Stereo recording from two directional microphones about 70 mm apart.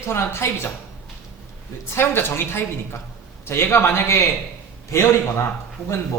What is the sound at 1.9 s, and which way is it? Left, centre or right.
A man's voice, left.